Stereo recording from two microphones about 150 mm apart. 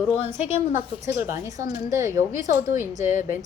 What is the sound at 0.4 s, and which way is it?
A woman's voice, 15° right (ahead or behind).